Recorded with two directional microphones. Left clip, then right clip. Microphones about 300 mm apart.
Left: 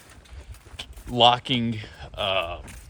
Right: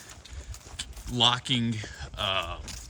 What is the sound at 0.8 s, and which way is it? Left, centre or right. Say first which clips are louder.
Speech: left 6 dB; centre.